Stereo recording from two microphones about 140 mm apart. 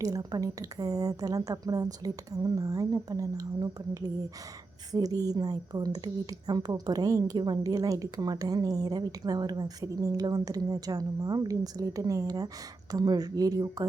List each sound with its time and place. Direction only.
0.0 s a woman's voice: 25° right (ahead or behind)